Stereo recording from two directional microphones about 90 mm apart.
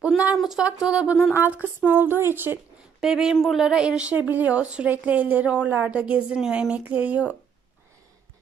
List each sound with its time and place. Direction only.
0.0 s speech: 15° right (ahead or behind)
0.4 s speech: 5° right (ahead or behind); by 2.6 s 25° right (ahead or behind)
3.0 s speech: 5° right (ahead or behind)